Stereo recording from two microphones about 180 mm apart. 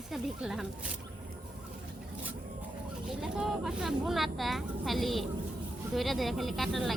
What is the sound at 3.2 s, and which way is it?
Speech, 5° right (ahead or behind).